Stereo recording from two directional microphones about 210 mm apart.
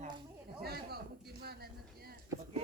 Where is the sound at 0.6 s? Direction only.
50° right (ahead or behind).